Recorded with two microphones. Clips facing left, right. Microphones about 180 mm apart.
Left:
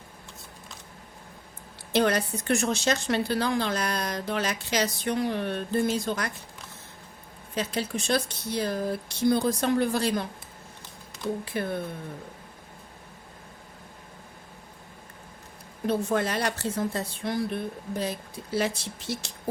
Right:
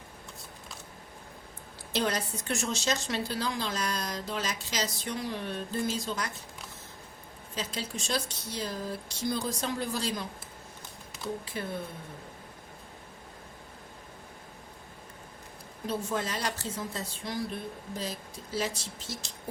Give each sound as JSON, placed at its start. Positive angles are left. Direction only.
{"t": 1.9, "sound": "a woman's voice", "side_deg": 60}
{"t": 7.5, "sound": "a woman's voice", "side_deg": 60}
{"t": 11.5, "sound": "a woman's voice", "side_deg": 60}
{"t": 15.9, "sound": "a woman's voice", "side_deg": 60}